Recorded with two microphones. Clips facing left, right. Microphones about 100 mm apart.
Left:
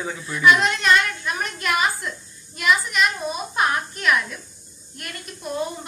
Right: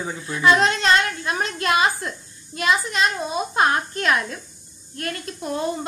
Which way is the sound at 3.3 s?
25° right (ahead or behind).